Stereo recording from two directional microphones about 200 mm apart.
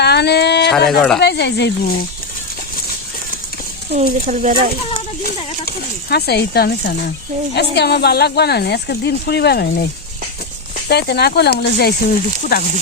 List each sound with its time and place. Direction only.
0.0 s a sound: 55° left (ahead or behind)
0.7 s speech: centre (ahead or behind)
1.2 s speech: 55° left (ahead or behind)
3.9 s speech: 40° right (ahead or behind)
5.6 s speech: 55° left (ahead or behind)
10.8 s speech: 55° left (ahead or behind)